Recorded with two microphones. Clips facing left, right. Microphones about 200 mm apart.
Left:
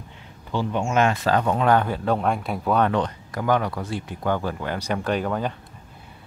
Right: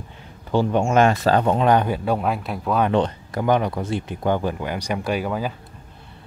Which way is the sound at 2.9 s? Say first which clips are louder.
Right 4 dB; 25° right (ahead or behind).